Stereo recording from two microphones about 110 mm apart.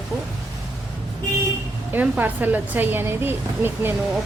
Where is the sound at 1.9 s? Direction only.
15° right (ahead or behind).